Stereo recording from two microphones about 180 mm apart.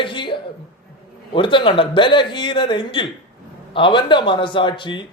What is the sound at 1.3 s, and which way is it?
A man's voice, 25° left (ahead or behind).